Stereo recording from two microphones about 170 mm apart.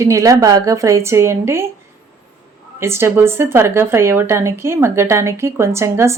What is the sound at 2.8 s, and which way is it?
Speech, 15° right (ahead or behind).